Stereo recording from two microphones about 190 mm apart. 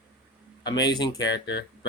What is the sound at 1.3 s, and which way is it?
Speech, 65° left (ahead or behind).